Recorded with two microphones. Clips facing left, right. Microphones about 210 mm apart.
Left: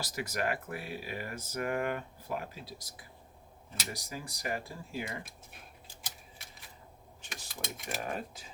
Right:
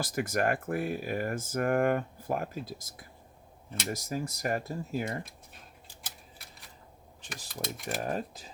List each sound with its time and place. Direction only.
0.0 s speech: 50° right (ahead or behind)
7.3 s speech: centre (ahead or behind)
7.9 s speech: 35° right (ahead or behind)